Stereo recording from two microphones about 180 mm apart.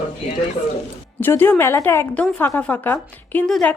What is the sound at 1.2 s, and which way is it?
A woman's voice, 10° left (ahead or behind).